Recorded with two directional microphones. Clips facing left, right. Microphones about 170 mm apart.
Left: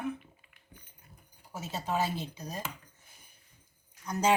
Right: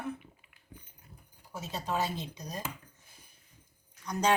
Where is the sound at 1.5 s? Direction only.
10° left (ahead or behind).